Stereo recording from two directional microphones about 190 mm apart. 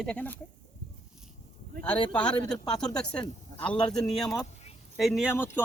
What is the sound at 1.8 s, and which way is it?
Speech, 5° left (ahead or behind).